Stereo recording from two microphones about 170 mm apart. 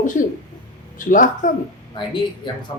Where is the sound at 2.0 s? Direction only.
25° left (ahead or behind).